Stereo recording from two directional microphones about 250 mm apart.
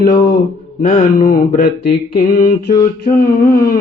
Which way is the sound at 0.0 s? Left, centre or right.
Left.